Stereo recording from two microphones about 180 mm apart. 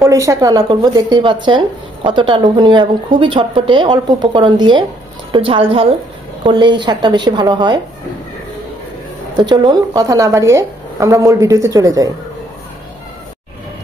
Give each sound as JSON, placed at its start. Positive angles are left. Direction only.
{"t": 0.0, "sound": "a woman's voice", "side_deg": -15}
{"t": 9.4, "sound": "speech", "side_deg": -25}